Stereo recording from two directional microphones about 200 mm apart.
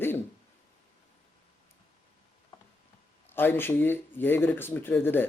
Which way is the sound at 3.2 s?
10° left (ahead or behind).